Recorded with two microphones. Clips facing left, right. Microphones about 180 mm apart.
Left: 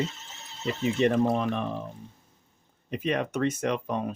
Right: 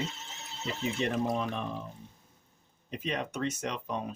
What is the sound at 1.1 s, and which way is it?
Speech, 60° left (ahead or behind).